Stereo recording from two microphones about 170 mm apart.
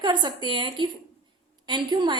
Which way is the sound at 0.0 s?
25° right (ahead or behind).